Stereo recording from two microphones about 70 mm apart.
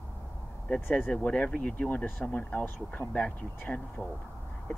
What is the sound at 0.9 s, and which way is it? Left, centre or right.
Speech, left.